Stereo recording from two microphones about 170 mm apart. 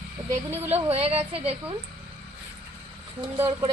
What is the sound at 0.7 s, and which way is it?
A woman's voice, 35° right (ahead or behind).